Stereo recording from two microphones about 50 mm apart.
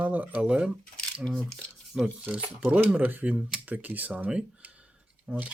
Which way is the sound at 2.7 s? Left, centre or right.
Right.